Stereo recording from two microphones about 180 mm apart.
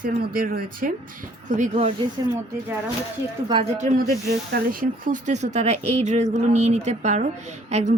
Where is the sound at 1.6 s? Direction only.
35° right (ahead or behind).